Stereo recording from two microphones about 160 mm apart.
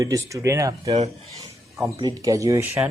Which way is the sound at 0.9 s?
40° right (ahead or behind).